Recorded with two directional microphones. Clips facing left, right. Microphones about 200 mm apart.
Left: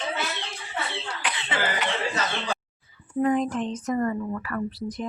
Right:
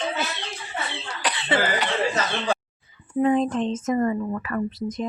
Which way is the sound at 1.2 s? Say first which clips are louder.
Right 6 dB; 35° right (ahead or behind).